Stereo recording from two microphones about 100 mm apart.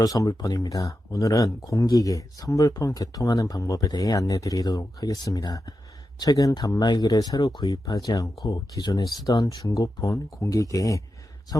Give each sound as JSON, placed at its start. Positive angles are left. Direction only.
{"t": 0.0, "sound": "speech", "side_deg": 40}